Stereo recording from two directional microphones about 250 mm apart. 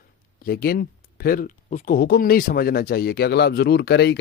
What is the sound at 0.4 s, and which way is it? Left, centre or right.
Speech, left.